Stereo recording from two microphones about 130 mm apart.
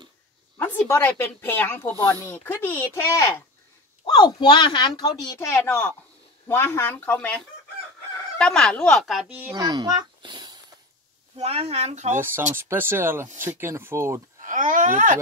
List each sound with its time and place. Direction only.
0.6 s speech: 15° left (ahead or behind)
4.0 s speech: 35° left (ahead or behind)
5.5 s speech: 20° left (ahead or behind); by 9.3 s centre (ahead or behind)
9.5 s speech: 30° right (ahead or behind)
11.3 s speech: 50° right (ahead or behind)
12.5 s speech: 20° right (ahead or behind)
14.4 s speech: 85° right